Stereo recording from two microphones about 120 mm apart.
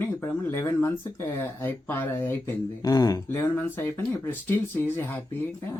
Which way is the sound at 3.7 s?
20° left (ahead or behind).